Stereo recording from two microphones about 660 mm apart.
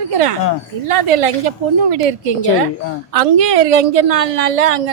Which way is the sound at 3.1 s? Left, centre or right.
Right.